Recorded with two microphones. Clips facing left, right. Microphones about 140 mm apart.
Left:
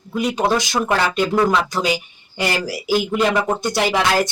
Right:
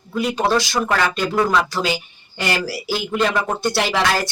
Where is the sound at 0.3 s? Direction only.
20° left (ahead or behind).